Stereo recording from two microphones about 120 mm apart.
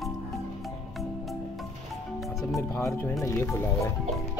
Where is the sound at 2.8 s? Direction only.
25° left (ahead or behind).